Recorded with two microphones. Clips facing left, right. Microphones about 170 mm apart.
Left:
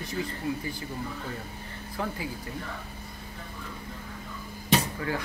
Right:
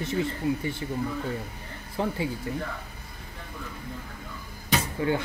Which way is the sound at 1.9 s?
25° right (ahead or behind).